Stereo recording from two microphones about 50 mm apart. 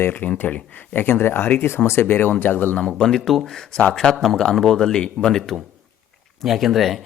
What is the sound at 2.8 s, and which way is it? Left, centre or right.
Speech, centre.